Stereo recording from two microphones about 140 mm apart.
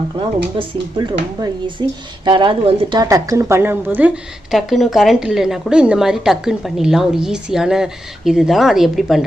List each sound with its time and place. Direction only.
0.5 s a woman's voice: 30° right (ahead or behind); by 4.2 s 10° right (ahead or behind)
4.5 s a woman's voice: centre (ahead or behind)